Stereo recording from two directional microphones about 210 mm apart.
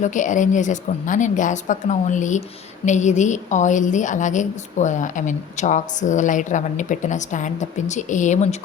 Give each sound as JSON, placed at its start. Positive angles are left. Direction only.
{"t": 0.0, "sound": "a woman's voice", "side_deg": 35}